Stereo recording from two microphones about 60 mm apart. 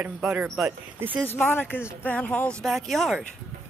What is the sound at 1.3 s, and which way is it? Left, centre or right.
Speech, left.